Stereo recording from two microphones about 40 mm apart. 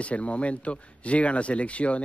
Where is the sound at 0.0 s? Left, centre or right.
Left.